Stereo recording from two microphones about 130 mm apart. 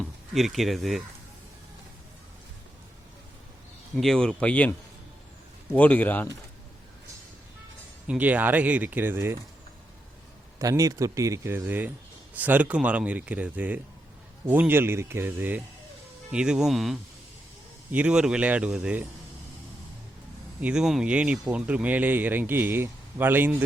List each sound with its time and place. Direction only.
0.3 s speech: centre (ahead or behind)
3.9 s speech: 5° left (ahead or behind)
5.7 s speech: 10° left (ahead or behind)
8.0 s speech: 10° right (ahead or behind)
10.6 s speech: 25° right (ahead or behind); by 19.0 s 10° right (ahead or behind)
20.6 s speech: 10° right (ahead or behind)